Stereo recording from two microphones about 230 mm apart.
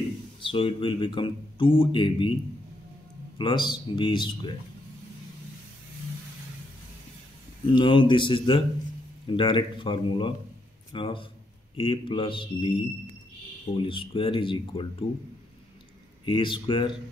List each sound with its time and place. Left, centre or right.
0.4 s speech: left
3.3 s speech: left
7.6 s a man's voice: left
16.3 s speech: left